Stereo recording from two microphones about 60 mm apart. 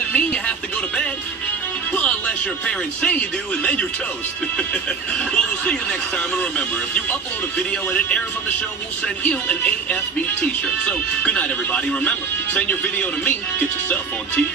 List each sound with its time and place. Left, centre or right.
0.1 s music: centre
2.0 s speech: left
5.3 s speech: centre
7.5 s speech: centre